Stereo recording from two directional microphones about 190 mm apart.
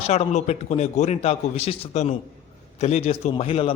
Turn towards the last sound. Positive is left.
turn(degrees=30)  # may be behind; listen again after turning